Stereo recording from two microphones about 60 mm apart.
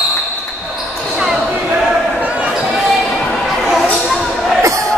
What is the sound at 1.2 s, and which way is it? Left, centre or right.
Basketball bounce, centre.